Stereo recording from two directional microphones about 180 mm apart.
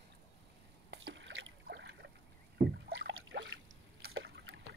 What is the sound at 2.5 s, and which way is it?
Rowboat, 65° right (ahead or behind).